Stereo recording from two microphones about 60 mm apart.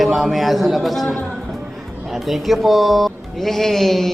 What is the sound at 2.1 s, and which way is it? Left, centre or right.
Speech, centre.